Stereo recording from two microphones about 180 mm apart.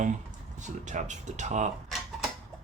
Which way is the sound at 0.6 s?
45° right (ahead or behind).